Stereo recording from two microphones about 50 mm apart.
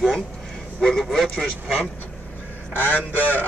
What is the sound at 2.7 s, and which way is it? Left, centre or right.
Speech, left.